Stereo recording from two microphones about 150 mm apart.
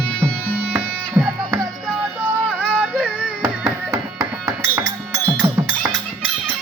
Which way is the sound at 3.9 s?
20° right (ahead or behind).